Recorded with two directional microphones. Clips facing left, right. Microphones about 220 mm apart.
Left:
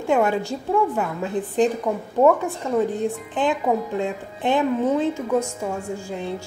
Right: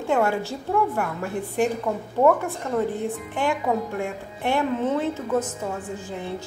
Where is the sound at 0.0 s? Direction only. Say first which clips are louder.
Left 2 dB; 15° left (ahead or behind).